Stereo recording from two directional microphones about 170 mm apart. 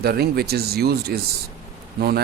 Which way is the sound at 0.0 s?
65° right (ahead or behind).